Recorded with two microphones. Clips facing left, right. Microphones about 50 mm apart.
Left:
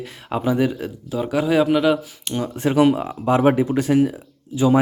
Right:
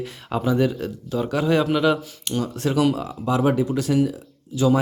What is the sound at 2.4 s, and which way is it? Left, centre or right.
Speech, centre.